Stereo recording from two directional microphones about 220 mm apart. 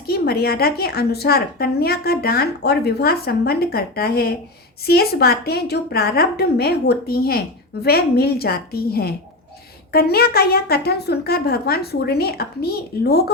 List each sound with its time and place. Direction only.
0.1 s a woman's voice: 45° left (ahead or behind)